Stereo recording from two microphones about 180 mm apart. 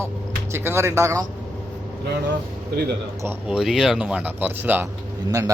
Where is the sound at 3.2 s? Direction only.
5° right (ahead or behind).